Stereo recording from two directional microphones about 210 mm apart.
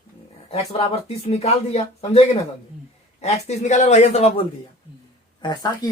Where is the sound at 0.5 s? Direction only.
30° left (ahead or behind).